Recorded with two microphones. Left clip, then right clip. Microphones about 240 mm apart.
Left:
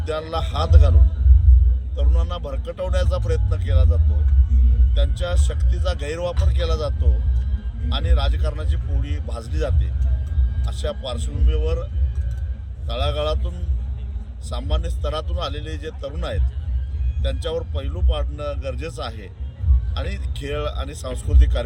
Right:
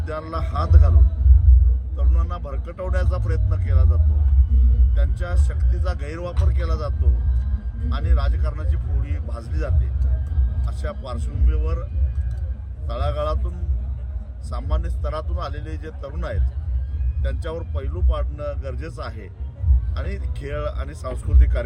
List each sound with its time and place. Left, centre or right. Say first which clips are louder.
0.0 s speech: left 4 dB; centre
2.0 s speech: left 3 dB; centre
12.9 s speech: left 2 dB; centre
14.5 s speech: left 3 dB; centre